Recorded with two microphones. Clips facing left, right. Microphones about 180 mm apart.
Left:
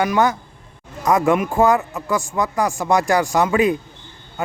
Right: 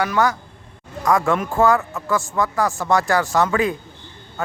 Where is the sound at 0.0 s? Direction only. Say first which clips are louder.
Left 2 dB; 20° left (ahead or behind).